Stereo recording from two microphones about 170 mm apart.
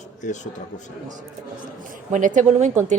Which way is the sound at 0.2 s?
45° left (ahead or behind).